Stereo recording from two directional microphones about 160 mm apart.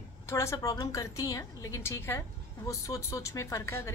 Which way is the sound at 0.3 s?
15° left (ahead or behind).